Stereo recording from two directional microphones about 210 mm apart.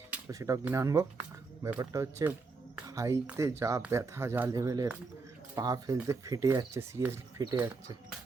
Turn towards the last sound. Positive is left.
turn(degrees=-15)  # may be behind; listen again after turning